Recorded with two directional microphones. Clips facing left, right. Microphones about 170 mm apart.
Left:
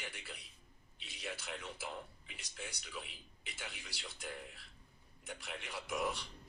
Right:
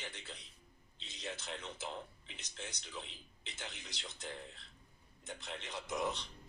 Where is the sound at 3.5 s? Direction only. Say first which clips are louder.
Right 1 dB; 20° right (ahead or behind).